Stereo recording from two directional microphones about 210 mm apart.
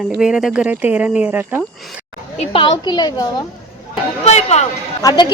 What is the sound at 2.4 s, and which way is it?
A woman's voice, 25° left (ahead or behind).